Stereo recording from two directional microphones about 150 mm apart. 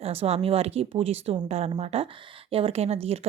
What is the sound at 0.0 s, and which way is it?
A woman's voice, 45° right (ahead or behind).